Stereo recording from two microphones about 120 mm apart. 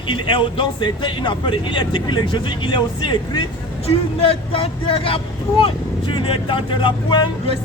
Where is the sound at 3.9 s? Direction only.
55° left (ahead or behind).